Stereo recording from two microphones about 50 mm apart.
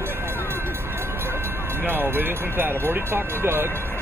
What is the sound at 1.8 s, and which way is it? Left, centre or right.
Speech, right.